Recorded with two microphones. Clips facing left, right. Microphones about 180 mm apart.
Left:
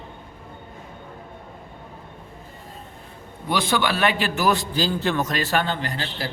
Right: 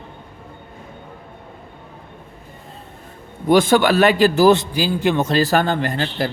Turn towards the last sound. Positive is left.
turn(degrees=-50)  # may be behind; listen again after turning